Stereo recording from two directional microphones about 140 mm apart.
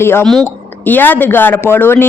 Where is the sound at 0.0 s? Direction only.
15° left (ahead or behind).